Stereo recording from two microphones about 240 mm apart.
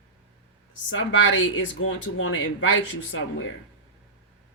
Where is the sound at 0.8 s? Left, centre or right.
Left.